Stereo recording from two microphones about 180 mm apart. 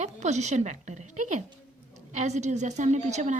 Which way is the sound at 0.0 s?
40° right (ahead or behind).